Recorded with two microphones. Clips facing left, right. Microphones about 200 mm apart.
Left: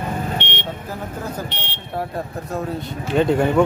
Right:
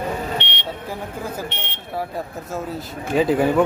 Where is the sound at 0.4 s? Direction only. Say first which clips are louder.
Left 3 dB; 50° left (ahead or behind).